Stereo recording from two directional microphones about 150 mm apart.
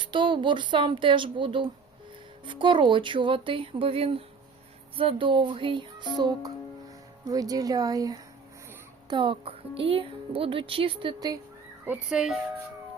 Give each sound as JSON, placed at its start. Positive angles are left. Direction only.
{"t": 0.0, "sound": "speech", "side_deg": -30}
{"t": 11.9, "sound": "speech", "side_deg": -5}